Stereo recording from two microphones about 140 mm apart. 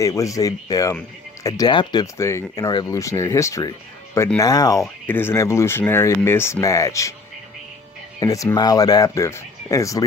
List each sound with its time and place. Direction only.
0.0 s speech: 25° left (ahead or behind)
5.0 s speech: 15° left (ahead or behind)
8.2 s speech: 25° left (ahead or behind)